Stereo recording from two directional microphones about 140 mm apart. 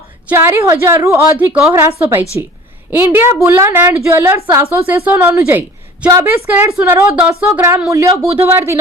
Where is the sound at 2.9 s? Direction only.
15° right (ahead or behind).